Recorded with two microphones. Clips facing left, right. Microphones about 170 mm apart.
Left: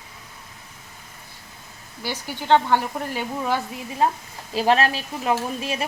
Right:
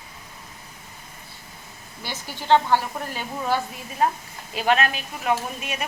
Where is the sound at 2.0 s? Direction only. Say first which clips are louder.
Left 1 dB; 15° left (ahead or behind).